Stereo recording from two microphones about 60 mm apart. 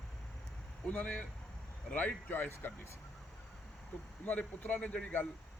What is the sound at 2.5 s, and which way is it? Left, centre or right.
Speech, left.